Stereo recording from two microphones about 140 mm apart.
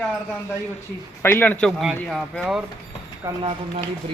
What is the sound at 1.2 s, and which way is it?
Speech, 15° left (ahead or behind).